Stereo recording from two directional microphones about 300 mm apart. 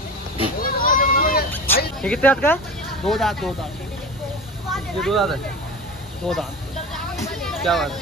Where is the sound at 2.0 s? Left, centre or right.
Centre.